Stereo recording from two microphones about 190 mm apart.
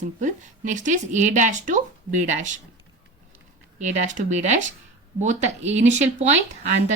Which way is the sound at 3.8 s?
40° right (ahead or behind).